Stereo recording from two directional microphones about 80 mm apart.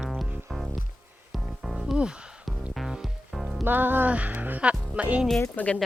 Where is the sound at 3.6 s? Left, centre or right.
Right.